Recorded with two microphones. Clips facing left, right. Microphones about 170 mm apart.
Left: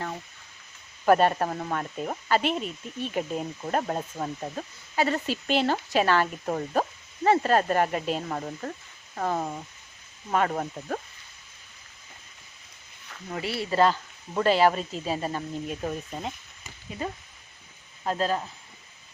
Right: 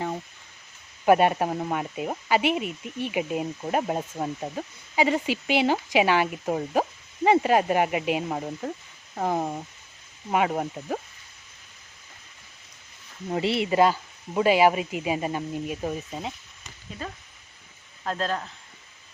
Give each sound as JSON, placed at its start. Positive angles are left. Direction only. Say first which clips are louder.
{"t": 1.0, "sound": "speech", "louder": "right 1 dB", "side_deg": -10}
{"t": 13.3, "sound": "speech", "louder": "right 4 dB", "side_deg": -25}
{"t": 17.0, "sound": "speech", "louder": "left 4 dB", "side_deg": 15}